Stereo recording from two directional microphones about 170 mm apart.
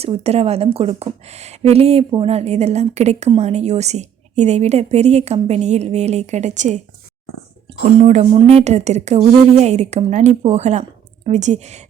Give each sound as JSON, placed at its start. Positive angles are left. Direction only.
{"t": 0.0, "sound": "a woman's voice", "side_deg": -35}
{"t": 2.0, "sound": "speech", "side_deg": -25}
{"t": 2.3, "sound": "a woman's voice", "side_deg": -40}
{"t": 7.9, "sound": "a woman's voice", "side_deg": -40}